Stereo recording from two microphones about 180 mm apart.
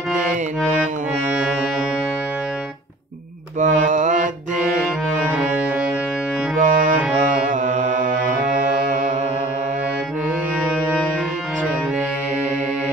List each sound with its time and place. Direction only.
3.5 s mantra: 45° right (ahead or behind)
5.3 s music: 5° right (ahead or behind)
6.6 s music: 45° right (ahead or behind)
7.0 s music: 5° right (ahead or behind)
7.4 s music: 45° right (ahead or behind)